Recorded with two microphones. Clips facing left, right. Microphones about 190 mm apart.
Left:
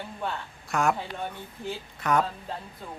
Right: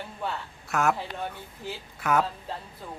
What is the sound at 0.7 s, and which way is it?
A man's voice, 5° right (ahead or behind).